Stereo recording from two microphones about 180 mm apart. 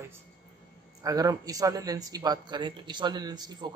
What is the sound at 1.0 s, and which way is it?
Speech, 20° right (ahead or behind).